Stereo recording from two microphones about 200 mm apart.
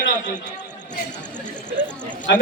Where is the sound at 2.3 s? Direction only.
60° left (ahead or behind).